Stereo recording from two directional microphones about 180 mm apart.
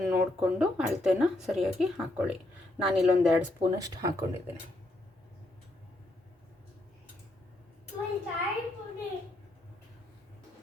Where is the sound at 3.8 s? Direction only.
20° right (ahead or behind).